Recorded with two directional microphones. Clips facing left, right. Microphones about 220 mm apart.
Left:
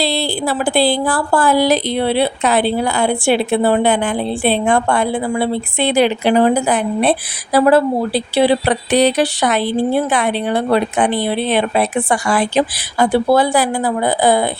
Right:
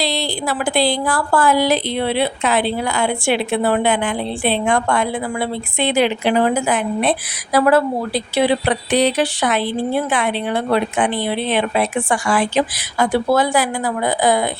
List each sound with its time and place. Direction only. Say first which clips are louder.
0.3 s a woman's voice: left 3 dB; 35° left (ahead or behind)
5.8 s speech: left 2 dB; 35° left (ahead or behind)